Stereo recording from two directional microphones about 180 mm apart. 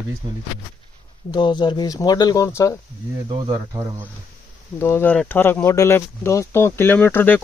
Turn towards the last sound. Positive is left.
turn(degrees=10)  # may be behind; listen again after turning